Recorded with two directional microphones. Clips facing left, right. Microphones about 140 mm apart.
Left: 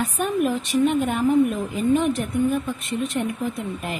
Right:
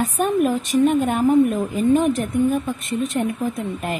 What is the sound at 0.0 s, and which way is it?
A woman's voice, 45° right (ahead or behind).